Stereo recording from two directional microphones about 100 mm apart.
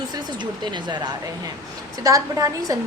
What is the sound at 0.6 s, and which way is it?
Speech, 50° right (ahead or behind).